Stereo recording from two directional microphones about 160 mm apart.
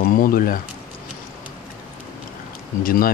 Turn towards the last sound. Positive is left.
turn(degrees=60)  # may be behind; listen again after turning